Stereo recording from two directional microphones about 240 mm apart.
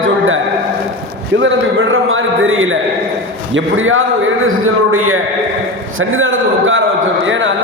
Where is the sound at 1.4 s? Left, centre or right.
Right.